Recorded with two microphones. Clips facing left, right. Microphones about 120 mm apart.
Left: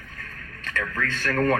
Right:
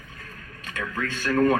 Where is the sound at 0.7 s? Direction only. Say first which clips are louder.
Left 1 dB; 15° right (ahead or behind).